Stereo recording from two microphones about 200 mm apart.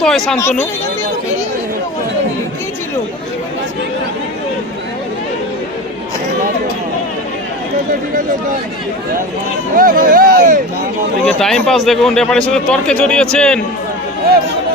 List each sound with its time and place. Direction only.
0.0 s a man's voice: centre (ahead or behind)
9.7 s speech: 45° right (ahead or behind)
11.3 s a man's voice: 5° left (ahead or behind)